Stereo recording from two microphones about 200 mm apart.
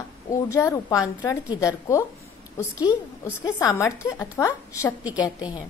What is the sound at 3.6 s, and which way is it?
A woman's voice, 15° left (ahead or behind).